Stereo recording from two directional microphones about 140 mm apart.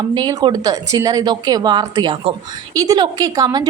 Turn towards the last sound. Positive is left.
turn(degrees=-30)  # may be behind; listen again after turning